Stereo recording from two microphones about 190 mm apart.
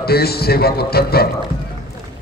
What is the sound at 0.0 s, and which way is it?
A man's voice, 55° left (ahead or behind).